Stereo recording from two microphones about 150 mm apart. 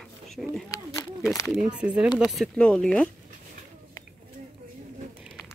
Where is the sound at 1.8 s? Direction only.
10° right (ahead or behind).